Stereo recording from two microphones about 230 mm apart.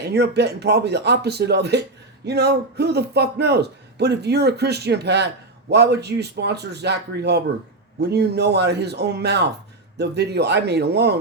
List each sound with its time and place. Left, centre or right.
0.0 s a man's voice: right